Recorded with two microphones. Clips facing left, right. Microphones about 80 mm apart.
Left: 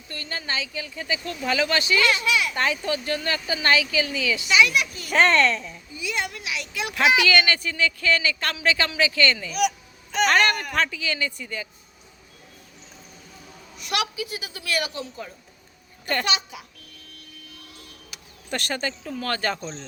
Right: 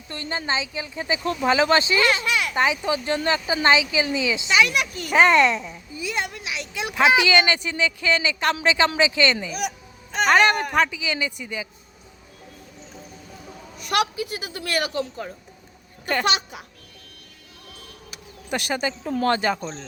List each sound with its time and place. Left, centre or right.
0.1 s speech: right
2.6 s a woman's voice: centre
4.5 s a woman's voice: right
5.1 s a woman's voice: centre
6.0 s speech: right
9.6 s baby cry: right
10.2 s a woman's voice: centre
10.5 s speech: right
10.8 s a woman's voice: centre
13.8 s a woman's voice: right
16.2 s a woman's voice: right
18.5 s a woman's voice: centre
19.2 s speech: right